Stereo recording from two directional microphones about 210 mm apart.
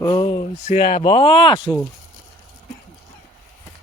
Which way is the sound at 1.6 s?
5° right (ahead or behind).